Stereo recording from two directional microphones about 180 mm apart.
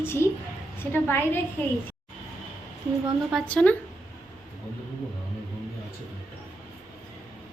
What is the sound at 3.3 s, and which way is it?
Speech, 5° left (ahead or behind).